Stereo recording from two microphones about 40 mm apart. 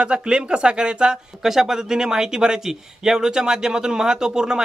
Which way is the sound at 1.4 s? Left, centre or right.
Centre.